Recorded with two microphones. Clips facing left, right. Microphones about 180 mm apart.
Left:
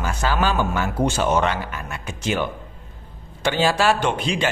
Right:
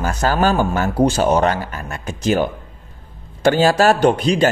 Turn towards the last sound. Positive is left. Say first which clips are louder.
# right 8 dB
turn(degrees=-40)  # may be behind; listen again after turning